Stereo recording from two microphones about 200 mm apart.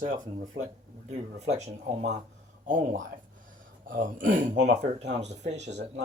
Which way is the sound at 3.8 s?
45° right (ahead or behind).